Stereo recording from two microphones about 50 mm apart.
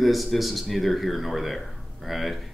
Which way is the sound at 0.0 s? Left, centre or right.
Centre.